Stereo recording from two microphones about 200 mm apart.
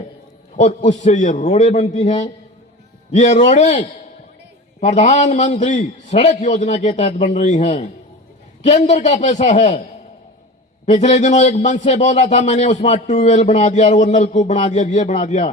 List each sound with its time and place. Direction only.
0.5 s a man's voice: 35° left (ahead or behind)
10.8 s a man's voice: 35° left (ahead or behind)